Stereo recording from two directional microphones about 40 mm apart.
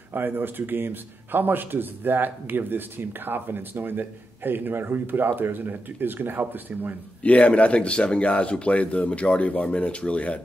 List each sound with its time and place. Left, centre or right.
0.1 s a man's voice: right
7.2 s a man's voice: left